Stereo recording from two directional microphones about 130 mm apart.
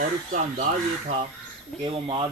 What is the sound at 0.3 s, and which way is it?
Speech, 70° right (ahead or behind).